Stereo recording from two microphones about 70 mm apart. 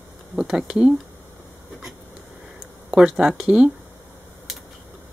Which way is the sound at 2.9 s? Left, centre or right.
Centre.